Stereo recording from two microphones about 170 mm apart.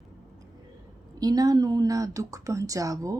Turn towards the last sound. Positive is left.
turn(degrees=-20)  # may be behind; listen again after turning